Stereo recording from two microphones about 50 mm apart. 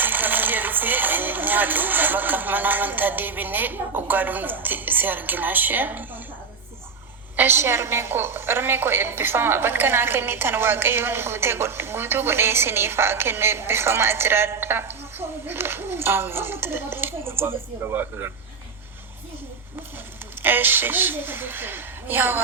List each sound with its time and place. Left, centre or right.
0.0 s speech: right
7.3 s a woman's voice: right
20.4 s a woman's voice: right